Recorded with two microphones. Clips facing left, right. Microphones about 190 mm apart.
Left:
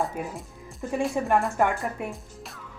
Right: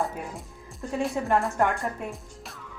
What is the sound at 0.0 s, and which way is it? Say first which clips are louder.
Speech: left 1 dB; centre (ahead or behind).